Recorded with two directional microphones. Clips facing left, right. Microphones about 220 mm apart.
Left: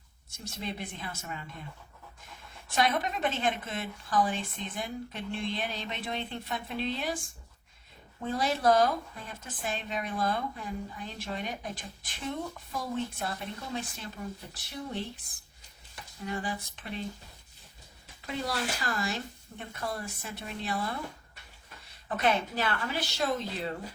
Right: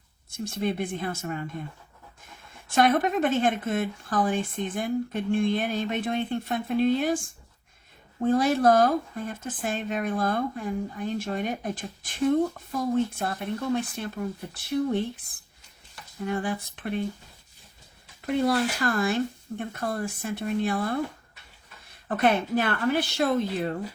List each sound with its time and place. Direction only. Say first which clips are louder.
0.3 s speech: right 10 dB; 55° right (ahead or behind)
2.7 s speech: right 7 dB; 55° right (ahead or behind)
8.2 s speech: right 7 dB; 50° right (ahead or behind)
16.2 s a woman's voice: right 6 dB; 55° right (ahead or behind)
18.3 s speech: right 10 dB; 55° right (ahead or behind)
22.1 s a woman's voice: right 6 dB; 55° right (ahead or behind)